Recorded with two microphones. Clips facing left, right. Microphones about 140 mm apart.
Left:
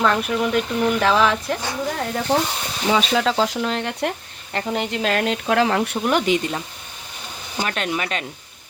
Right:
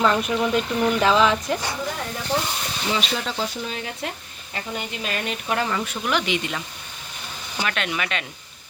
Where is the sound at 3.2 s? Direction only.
90° left; by 6.0 s 65° left (ahead or behind).